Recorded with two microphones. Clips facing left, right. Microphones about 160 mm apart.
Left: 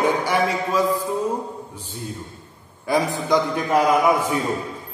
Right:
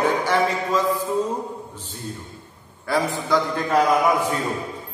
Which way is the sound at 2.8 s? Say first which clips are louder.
Left 2 dB; 15° left (ahead or behind).